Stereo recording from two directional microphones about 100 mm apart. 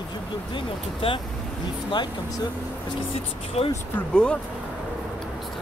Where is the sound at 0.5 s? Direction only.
60° left (ahead or behind).